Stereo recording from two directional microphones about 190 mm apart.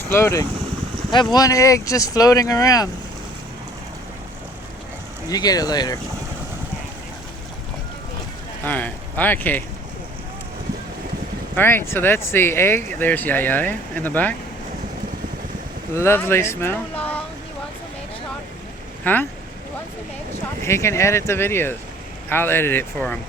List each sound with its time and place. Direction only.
0.1 s speech: 15° left (ahead or behind)
5.3 s speech: 20° left (ahead or behind)
8.6 s speech: 10° left (ahead or behind)
11.5 s speech: 10° left (ahead or behind)
16.0 s speech: 15° left (ahead or behind)
17.0 s a sound: 10° left (ahead or behind)
19.0 s speech: 10° left (ahead or behind)
20.6 s speech: 15° left (ahead or behind)